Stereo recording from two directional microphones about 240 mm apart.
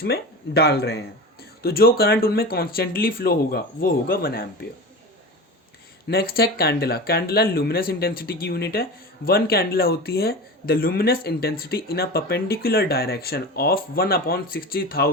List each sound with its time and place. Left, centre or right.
0.0 s speech: left
6.1 s speech: left